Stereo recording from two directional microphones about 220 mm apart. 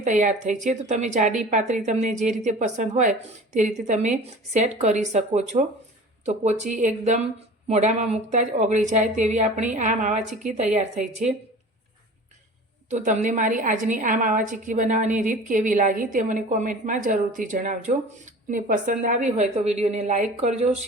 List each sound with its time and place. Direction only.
0.0 s a woman's voice: 35° right (ahead or behind)
12.9 s a woman's voice: 35° right (ahead or behind)